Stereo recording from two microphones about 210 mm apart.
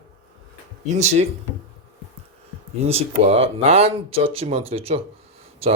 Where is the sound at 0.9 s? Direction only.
30° right (ahead or behind).